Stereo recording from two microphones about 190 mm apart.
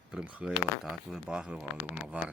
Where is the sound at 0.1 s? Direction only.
5° right (ahead or behind).